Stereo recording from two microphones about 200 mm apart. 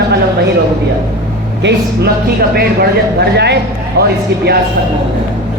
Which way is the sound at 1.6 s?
60° right (ahead or behind).